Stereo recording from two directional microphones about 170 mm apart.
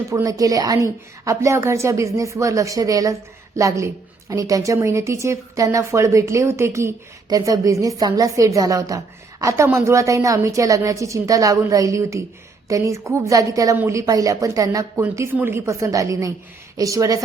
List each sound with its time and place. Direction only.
0.1 s a woman's voice: 20° right (ahead or behind)